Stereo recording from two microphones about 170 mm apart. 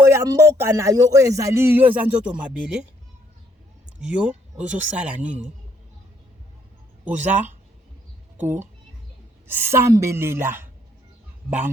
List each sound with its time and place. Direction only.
0.0 s speech: 15° right (ahead or behind)
4.0 s speech: 5° right (ahead or behind)
8.4 s speech: 10° right (ahead or behind)